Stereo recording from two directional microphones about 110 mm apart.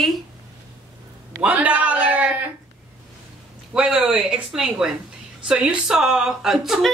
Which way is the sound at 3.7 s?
10° right (ahead or behind).